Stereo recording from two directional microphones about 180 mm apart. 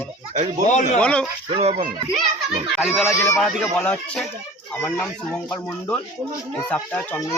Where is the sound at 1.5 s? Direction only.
40° right (ahead or behind).